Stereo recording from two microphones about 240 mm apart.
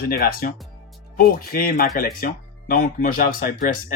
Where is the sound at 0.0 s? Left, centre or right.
Left.